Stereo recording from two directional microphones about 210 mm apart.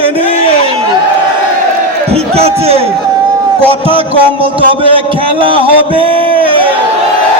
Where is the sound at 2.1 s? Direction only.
30° right (ahead or behind).